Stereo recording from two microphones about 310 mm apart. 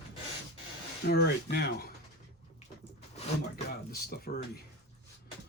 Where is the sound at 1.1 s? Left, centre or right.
Left.